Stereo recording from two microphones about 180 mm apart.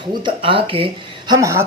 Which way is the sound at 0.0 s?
25° right (ahead or behind).